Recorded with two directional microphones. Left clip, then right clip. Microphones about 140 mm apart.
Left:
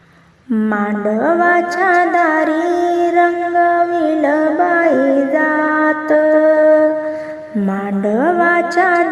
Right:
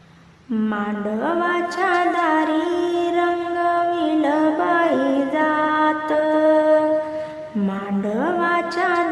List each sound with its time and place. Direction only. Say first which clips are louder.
0.5 s mantra: left 7 dB; 35° left (ahead or behind)
2.0 s music: left 6 dB; 35° left (ahead or behind)
8.0 s music: left 8 dB; 35° left (ahead or behind)